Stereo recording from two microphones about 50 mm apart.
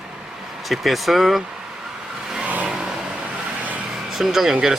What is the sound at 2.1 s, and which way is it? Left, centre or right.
Vehicle, centre.